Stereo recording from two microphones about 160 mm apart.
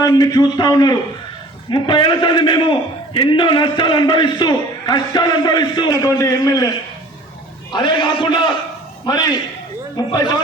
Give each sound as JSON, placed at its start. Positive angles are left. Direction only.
{"t": 0.0, "sound": "a man's voice", "side_deg": 25}
{"t": 7.7, "sound": "a man's voice", "side_deg": 30}